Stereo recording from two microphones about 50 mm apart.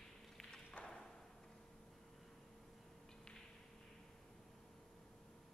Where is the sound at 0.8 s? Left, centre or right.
Centre.